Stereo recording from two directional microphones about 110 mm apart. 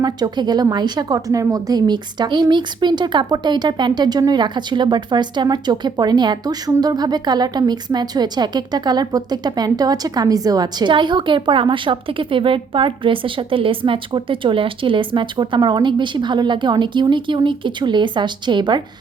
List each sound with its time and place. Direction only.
0.0 s a woman's voice: 40° right (ahead or behind)